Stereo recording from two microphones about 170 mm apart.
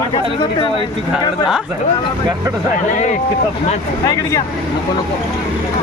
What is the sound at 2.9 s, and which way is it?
Speech, 45° left (ahead or behind).